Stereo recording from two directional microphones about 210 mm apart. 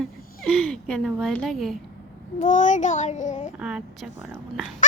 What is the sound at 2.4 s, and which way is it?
A child's voice, 35° left (ahead or behind).